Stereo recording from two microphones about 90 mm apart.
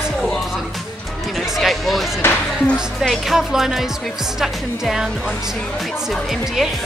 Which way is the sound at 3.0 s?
Centre (ahead or behind).